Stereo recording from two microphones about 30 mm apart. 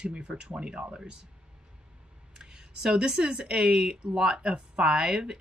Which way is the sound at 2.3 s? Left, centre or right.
Right.